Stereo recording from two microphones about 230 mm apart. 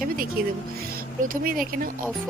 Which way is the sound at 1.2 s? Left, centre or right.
Right.